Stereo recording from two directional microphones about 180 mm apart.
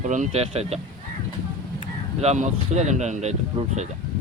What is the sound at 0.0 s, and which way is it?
Speech, 45° right (ahead or behind).